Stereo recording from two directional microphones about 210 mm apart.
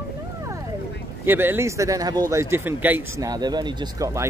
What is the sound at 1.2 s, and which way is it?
A man's voice, 10° right (ahead or behind).